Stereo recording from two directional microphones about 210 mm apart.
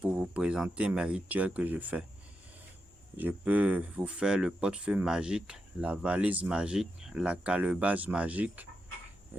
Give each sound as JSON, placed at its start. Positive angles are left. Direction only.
{"t": 0.0, "sound": "speech", "side_deg": -5}
{"t": 3.2, "sound": "speech", "side_deg": -10}